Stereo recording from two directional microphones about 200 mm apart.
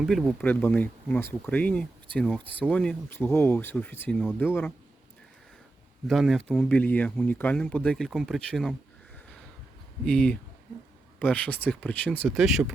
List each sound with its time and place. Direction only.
0.0 s speech: centre (ahead or behind)
6.1 s speech: centre (ahead or behind)
10.0 s speech: 5° left (ahead or behind)